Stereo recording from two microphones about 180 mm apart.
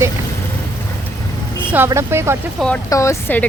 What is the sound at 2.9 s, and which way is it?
Speech, 15° left (ahead or behind).